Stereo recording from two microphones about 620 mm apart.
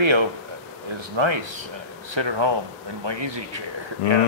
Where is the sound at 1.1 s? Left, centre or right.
Right.